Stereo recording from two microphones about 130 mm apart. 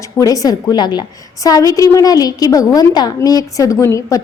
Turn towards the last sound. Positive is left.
turn(degrees=25)  # may be behind; listen again after turning